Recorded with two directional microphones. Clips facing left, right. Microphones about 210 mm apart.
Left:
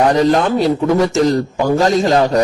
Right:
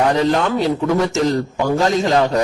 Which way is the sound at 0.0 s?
40° left (ahead or behind).